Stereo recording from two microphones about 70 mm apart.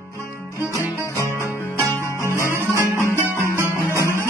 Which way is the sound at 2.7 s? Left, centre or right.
Left.